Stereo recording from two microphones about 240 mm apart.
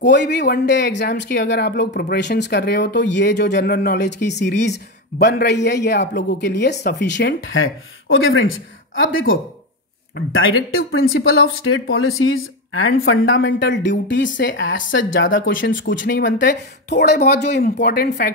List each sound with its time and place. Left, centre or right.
0.0 s speech: left